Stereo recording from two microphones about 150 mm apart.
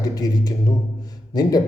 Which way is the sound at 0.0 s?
25° left (ahead or behind).